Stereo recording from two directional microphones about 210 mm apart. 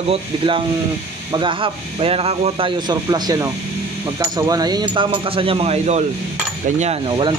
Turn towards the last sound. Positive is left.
turn(degrees=-25)  # may be behind; listen again after turning